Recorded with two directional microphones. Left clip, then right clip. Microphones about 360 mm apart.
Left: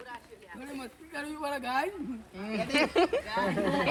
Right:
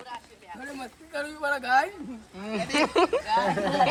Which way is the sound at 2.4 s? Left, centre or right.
Right.